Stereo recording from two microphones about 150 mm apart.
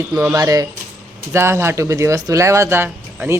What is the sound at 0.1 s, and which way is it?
Speech, 15° right (ahead or behind).